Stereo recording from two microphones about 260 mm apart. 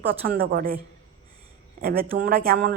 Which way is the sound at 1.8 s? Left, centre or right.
Right.